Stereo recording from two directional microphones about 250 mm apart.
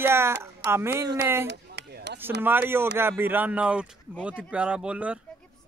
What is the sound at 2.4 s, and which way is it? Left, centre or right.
Speech, centre.